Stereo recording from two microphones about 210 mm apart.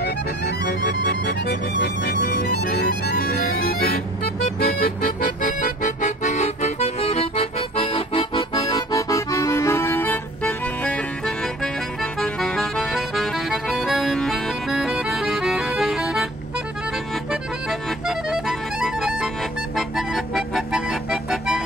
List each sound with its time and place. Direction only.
0.0 s music: 50° left (ahead or behind); by 16.3 s centre (ahead or behind)
17.1 s accordion: centre (ahead or behind)